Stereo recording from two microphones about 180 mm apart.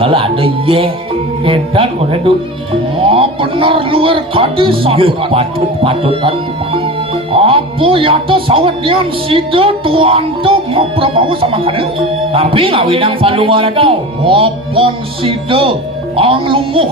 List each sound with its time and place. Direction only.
0.0 s a man's voice: 30° right (ahead or behind)
7.3 s a man's voice: 30° right (ahead or behind)